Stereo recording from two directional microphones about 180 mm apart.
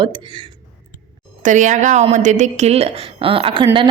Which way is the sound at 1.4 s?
45° right (ahead or behind).